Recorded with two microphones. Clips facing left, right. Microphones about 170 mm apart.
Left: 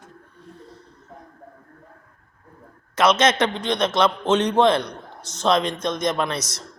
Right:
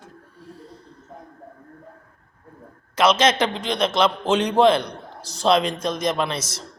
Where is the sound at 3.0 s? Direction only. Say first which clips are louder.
Even; 30° right (ahead or behind).